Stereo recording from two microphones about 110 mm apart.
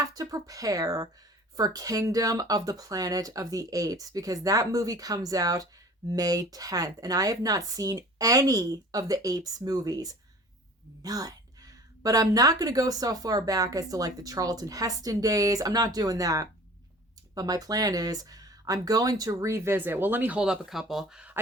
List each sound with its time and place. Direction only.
0.0 s speech: 35° right (ahead or behind); by 21.3 s 5° right (ahead or behind)